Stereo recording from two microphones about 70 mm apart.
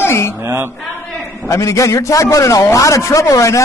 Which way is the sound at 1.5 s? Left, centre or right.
Left.